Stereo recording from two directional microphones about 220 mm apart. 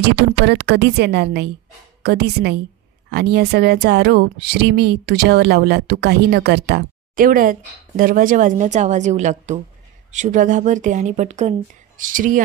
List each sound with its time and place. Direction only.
0.1 s speech: 50° right (ahead or behind)